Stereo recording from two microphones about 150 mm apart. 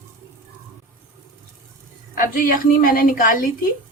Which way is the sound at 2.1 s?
75° left (ahead or behind).